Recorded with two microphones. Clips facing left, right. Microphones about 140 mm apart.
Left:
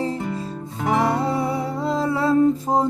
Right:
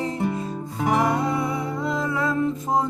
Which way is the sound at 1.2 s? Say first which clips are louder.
Left 2 dB; 30° left (ahead or behind).